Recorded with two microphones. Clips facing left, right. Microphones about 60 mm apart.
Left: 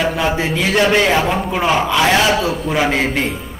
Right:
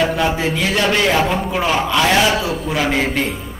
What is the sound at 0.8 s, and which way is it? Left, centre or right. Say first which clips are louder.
A man's voice: left 3 dB; centre.